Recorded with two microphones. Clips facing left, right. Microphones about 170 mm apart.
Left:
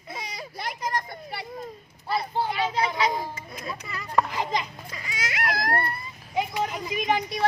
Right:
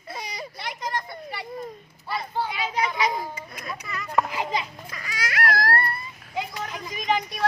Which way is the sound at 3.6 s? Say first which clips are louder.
Right 1 dB; 30° left (ahead or behind).